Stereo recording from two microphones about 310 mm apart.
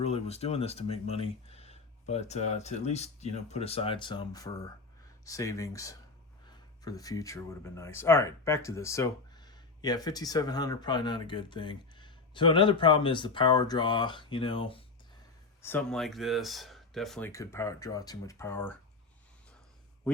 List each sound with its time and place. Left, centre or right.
0.0 s speech: centre
15.6 s speech: centre